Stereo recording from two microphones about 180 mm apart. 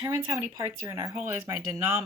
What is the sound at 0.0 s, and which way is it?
Speech, 15° right (ahead or behind).